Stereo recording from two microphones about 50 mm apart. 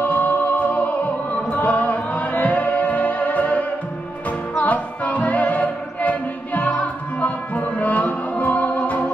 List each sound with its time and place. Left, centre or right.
0.0 s music: left